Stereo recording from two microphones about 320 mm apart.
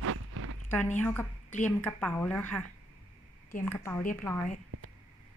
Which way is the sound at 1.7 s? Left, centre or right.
Centre.